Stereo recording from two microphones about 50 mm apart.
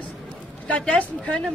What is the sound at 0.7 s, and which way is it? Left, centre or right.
Speech, left.